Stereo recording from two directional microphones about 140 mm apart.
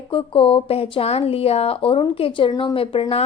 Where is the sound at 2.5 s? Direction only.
25° left (ahead or behind).